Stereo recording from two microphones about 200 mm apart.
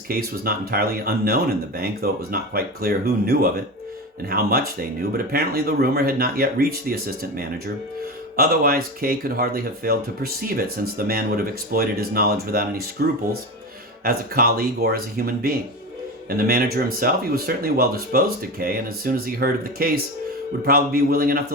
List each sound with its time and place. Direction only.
0.1 s speech: 50° right (ahead or behind)
14.0 s speech: 50° right (ahead or behind)